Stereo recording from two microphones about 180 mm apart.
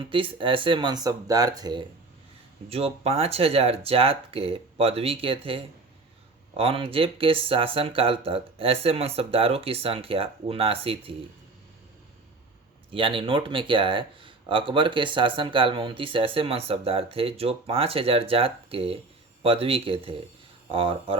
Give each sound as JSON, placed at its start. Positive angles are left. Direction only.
{"t": 0.0, "sound": "speech", "side_deg": -30}
{"t": 2.6, "sound": "speech", "side_deg": -35}
{"t": 12.9, "sound": "speech", "side_deg": -30}